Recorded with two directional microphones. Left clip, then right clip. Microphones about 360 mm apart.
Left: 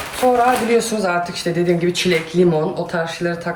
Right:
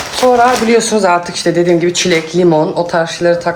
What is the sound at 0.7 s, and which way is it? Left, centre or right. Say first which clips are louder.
Speech: right 7 dB; right.